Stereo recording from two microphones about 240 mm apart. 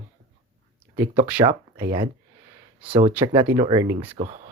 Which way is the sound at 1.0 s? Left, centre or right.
Right.